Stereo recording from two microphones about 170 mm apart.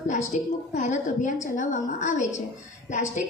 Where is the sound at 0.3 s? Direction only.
45° left (ahead or behind).